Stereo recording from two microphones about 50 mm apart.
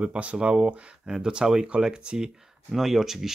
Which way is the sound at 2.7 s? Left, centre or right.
Centre.